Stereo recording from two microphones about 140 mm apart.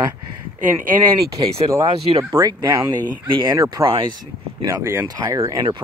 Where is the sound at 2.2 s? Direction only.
25° right (ahead or behind).